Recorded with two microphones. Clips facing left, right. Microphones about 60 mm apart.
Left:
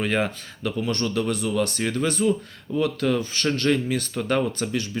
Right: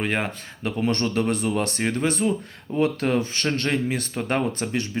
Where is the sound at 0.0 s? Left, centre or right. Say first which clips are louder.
Left 2 dB; centre.